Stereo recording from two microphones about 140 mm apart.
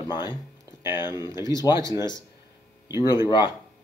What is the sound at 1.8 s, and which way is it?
Speech, 25° right (ahead or behind).